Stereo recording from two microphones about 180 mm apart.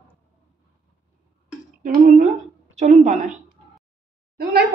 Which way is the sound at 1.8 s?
45° right (ahead or behind).